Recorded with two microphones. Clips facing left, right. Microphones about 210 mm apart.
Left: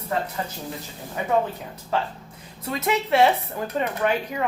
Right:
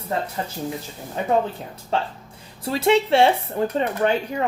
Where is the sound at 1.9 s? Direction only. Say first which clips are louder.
Right 1 dB; 30° right (ahead or behind).